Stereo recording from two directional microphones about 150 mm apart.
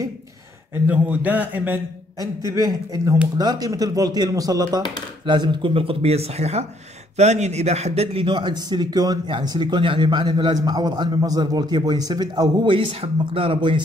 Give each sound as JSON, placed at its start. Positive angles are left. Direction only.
{"t": 0.8, "sound": "speech", "side_deg": -10}
{"t": 2.1, "sound": "a man's voice", "side_deg": -20}